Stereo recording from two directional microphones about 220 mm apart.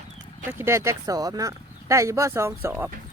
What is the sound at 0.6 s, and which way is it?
Speech, 15° right (ahead or behind).